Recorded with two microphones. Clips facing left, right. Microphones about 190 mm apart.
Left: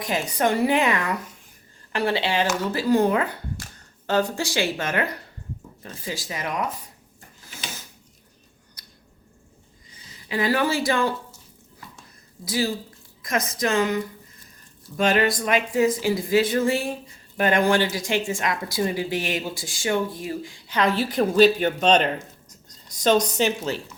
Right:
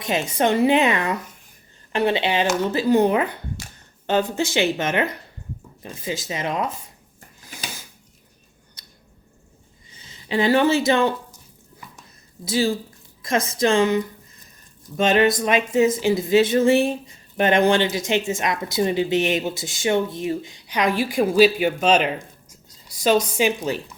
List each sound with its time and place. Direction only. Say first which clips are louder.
0.0 s speech: right 2 dB; 25° right (ahead or behind)
8.8 s squish: right 1 dB; 25° right (ahead or behind)
9.9 s speech: right 5 dB; 25° right (ahead or behind)
12.5 s speech: right 4 dB; 25° right (ahead or behind)